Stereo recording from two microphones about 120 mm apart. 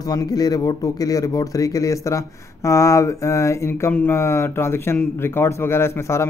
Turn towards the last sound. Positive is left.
turn(degrees=20)  # may be behind; listen again after turning